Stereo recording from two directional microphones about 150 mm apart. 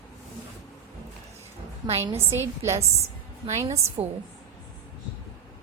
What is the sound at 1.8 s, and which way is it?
Speech, 30° right (ahead or behind).